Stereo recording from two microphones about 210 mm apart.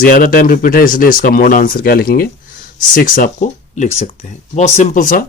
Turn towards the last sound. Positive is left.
turn(degrees=40)  # may be behind; listen again after turning